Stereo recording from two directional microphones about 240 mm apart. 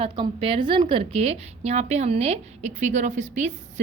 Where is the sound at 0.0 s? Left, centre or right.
Right.